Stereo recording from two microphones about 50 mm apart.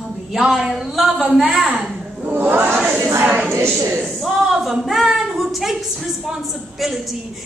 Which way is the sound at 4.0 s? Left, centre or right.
Centre.